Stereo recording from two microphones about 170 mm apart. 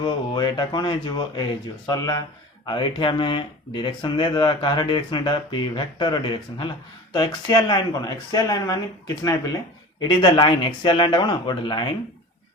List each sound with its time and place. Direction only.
0.0 s speech: 25° left (ahead or behind)
10.1 s speech: 25° left (ahead or behind)